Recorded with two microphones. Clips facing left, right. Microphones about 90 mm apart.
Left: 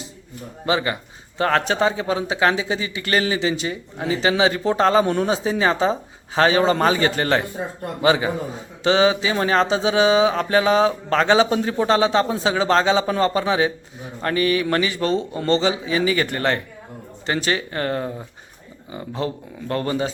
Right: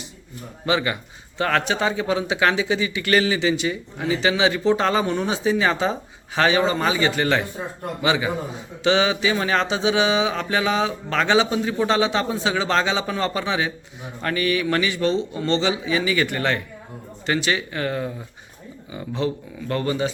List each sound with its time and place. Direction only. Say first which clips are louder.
0.6 s speech: left 1 dB; 30° left (ahead or behind)